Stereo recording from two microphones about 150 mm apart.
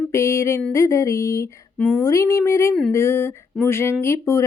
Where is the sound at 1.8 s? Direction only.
5° left (ahead or behind).